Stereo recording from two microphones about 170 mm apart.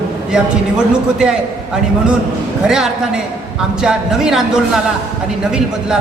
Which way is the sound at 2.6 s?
5° right (ahead or behind).